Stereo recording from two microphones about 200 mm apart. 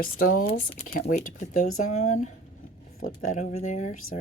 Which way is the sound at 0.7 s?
30° left (ahead or behind).